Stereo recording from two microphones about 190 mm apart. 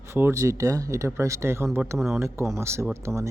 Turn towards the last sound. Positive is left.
turn(degrees=-15)  # may be behind; listen again after turning